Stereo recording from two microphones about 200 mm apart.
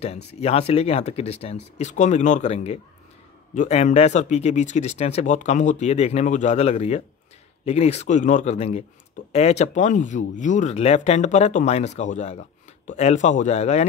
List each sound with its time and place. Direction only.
0.0 s speech: 30° left (ahead or behind)